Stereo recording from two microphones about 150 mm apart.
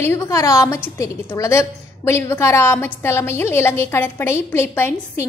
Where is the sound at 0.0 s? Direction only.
20° left (ahead or behind).